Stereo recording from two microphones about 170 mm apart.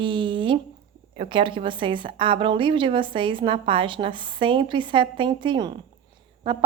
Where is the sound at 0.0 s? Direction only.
30° right (ahead or behind).